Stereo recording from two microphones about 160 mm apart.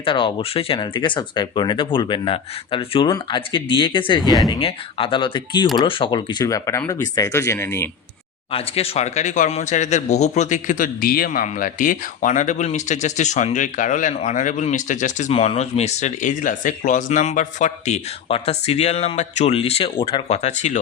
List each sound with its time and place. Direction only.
0.0 s speech: 35° left (ahead or behind); by 7.9 s 15° left (ahead or behind)
8.5 s speech: 35° left (ahead or behind)